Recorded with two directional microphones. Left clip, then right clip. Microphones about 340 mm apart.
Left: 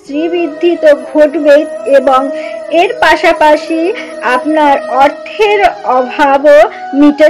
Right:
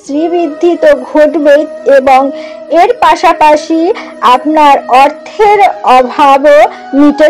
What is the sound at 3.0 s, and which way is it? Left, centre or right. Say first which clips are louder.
A woman's voice: right 2 dB; centre.